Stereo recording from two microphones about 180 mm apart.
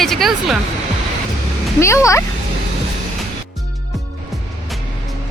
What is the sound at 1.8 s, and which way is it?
Speech, 15° left (ahead or behind).